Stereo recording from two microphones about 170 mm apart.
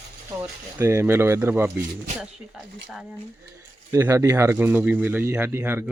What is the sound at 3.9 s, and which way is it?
Speech, 15° right (ahead or behind).